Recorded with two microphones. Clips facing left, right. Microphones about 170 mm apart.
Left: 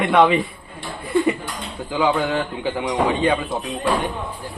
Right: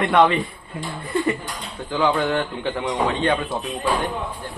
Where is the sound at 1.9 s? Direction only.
5° left (ahead or behind).